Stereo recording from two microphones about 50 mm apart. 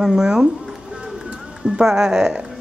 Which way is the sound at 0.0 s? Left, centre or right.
Centre.